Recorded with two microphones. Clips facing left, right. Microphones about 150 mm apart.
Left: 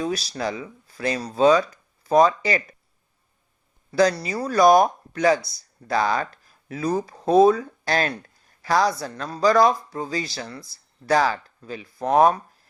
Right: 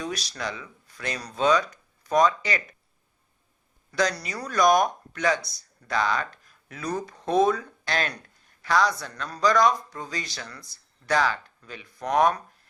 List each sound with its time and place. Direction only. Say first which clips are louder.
0.0 s speech: left 6 dB; 30° left (ahead or behind)
3.9 s speech: left 7 dB; 30° left (ahead or behind)